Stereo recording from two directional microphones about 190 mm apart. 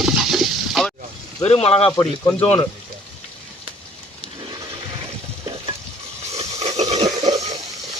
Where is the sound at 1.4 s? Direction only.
30° left (ahead or behind).